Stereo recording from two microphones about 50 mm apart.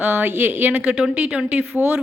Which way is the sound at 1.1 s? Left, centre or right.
Right.